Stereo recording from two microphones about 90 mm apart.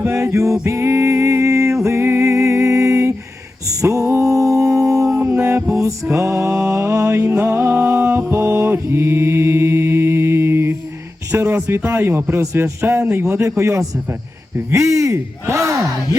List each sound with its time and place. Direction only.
0.0 s music: 30° right (ahead or behind)
5.4 s music: 25° right (ahead or behind)
8.3 s mantra: 25° right (ahead or behind)
11.3 s a man's voice: 30° right (ahead or behind)